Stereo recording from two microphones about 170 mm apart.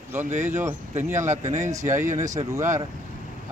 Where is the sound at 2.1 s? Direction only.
45° right (ahead or behind).